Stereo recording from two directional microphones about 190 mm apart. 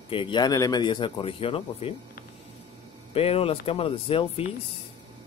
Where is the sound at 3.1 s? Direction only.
30° left (ahead or behind).